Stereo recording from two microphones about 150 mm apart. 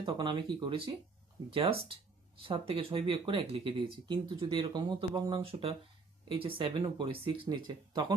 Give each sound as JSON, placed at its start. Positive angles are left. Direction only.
{"t": 0.0, "sound": "speech", "side_deg": -35}